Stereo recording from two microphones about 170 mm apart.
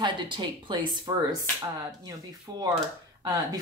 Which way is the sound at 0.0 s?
25° right (ahead or behind).